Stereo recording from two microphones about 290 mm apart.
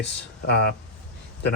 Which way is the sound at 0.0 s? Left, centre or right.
Left.